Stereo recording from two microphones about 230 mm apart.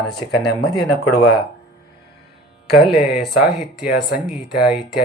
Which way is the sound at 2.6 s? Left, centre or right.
Centre.